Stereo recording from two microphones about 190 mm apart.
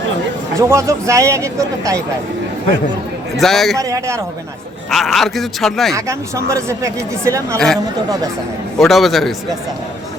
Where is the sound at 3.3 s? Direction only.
Centre (ahead or behind).